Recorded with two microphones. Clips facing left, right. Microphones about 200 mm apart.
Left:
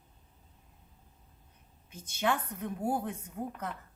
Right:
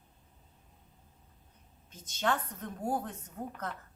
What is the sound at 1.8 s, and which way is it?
A woman's voice, 10° left (ahead or behind).